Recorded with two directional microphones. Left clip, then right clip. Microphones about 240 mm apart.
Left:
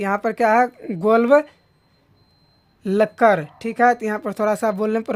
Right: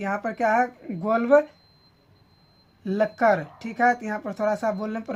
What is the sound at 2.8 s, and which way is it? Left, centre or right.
Speech, left.